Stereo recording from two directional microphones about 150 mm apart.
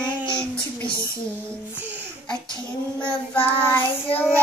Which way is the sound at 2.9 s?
10° left (ahead or behind).